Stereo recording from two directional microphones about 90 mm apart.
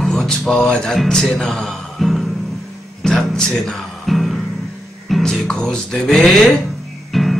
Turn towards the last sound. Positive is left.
turn(degrees=0)  # may be behind; listen again after turning